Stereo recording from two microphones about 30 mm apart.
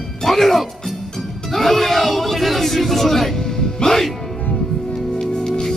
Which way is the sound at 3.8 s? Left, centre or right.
Left.